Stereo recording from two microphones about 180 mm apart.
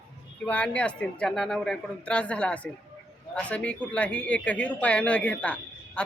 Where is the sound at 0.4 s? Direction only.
5° left (ahead or behind).